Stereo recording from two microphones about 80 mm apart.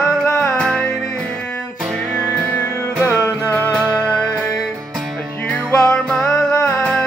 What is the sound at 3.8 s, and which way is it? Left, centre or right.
Music, centre.